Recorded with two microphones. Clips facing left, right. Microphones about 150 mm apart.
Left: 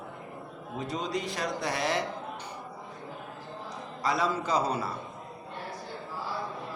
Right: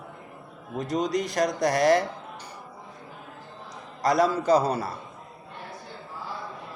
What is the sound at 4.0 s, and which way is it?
Speech, 40° right (ahead or behind).